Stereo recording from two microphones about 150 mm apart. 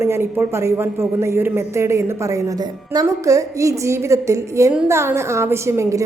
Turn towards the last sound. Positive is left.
turn(degrees=-20)  # may be behind; listen again after turning